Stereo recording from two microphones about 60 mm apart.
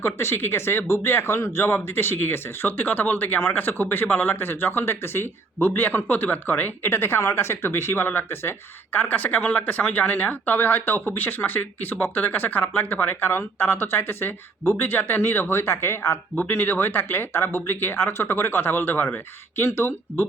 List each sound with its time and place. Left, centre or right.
0.0 s speech: left
1.4 s speech: left
1.6 s speech: left
16.3 s speech: left